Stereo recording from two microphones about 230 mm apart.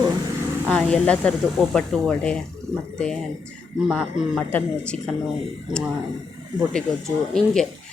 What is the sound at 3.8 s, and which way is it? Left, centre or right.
Speech, centre.